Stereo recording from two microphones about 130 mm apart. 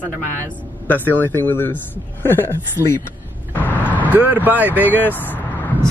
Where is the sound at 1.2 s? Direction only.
15° left (ahead or behind).